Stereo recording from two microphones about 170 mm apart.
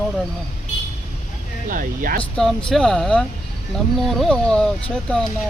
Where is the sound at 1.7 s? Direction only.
55° right (ahead or behind).